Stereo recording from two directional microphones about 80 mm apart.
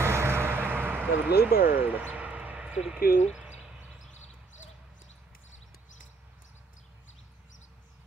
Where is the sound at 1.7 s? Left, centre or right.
Right.